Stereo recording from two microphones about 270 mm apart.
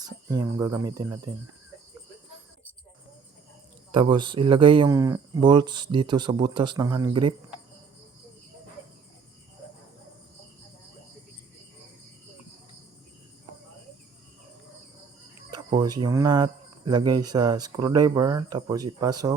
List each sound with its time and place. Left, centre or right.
0.0 s speech: centre
3.9 s speech: centre
15.4 s speech: centre